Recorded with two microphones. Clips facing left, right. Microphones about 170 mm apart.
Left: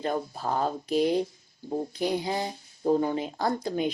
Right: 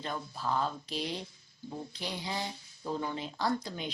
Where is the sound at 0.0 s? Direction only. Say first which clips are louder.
Left 7 dB; 50° left (ahead or behind).